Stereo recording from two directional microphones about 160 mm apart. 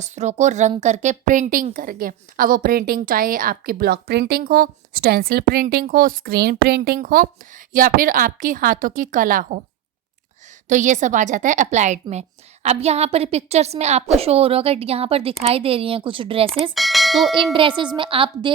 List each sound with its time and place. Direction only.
0.0 s a woman's voice: 45° right (ahead or behind)
10.7 s a woman's voice: 50° right (ahead or behind); by 16.5 s 35° right (ahead or behind)
16.7 s bell: centre (ahead or behind)
17.5 s a woman's voice: 30° right (ahead or behind)